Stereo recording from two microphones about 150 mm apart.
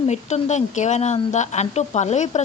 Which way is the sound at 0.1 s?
50° left (ahead or behind).